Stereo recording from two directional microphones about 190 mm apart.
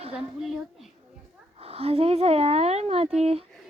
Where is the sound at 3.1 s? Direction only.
30° right (ahead or behind).